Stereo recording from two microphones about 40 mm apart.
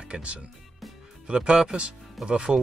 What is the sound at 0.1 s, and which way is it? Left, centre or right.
Speech, right.